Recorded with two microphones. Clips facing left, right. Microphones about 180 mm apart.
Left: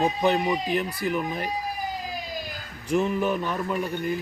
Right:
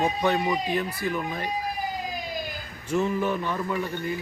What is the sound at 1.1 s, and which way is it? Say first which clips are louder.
Speech: left 4 dB; 15° left (ahead or behind).